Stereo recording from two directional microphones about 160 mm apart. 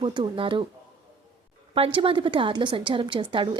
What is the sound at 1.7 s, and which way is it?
A woman's voice, 35° right (ahead or behind).